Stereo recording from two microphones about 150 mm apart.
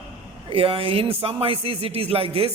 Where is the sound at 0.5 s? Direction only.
40° right (ahead or behind).